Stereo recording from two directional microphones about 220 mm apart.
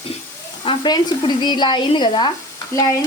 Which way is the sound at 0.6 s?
20° left (ahead or behind).